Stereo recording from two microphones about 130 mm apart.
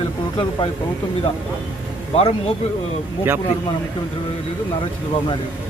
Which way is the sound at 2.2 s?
50° left (ahead or behind).